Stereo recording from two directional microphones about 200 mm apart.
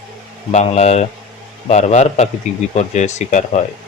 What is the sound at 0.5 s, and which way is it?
Speech, 35° left (ahead or behind).